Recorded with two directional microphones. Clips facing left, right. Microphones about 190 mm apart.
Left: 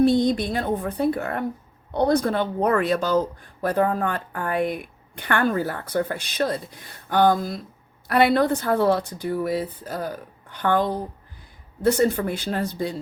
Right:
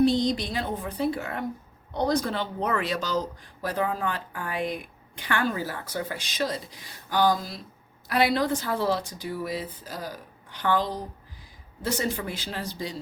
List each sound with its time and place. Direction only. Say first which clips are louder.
0.0 s speech: left 4 dB; 55° left (ahead or behind)